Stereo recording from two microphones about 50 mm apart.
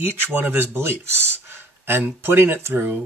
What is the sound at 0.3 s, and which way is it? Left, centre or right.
Speech, right.